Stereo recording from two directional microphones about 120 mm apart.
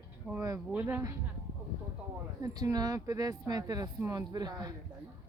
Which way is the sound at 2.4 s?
30° right (ahead or behind).